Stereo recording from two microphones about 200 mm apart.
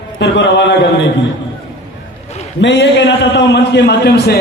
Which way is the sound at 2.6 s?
60° left (ahead or behind).